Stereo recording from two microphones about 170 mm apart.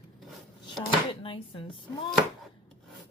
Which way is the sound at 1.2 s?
30° left (ahead or behind).